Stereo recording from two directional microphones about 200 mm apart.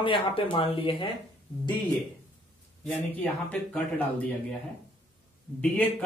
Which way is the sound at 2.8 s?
5° left (ahead or behind).